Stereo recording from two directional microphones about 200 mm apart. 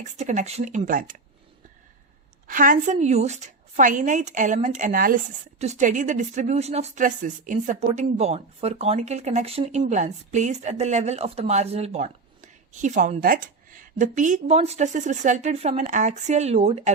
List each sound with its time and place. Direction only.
0.0 s a woman's voice: 35° right (ahead or behind)
2.5 s a woman's voice: 40° right (ahead or behind)